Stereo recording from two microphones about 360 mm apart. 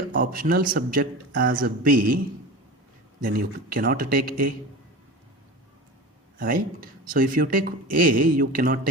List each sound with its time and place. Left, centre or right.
0.1 s speech: right
6.4 s speech: right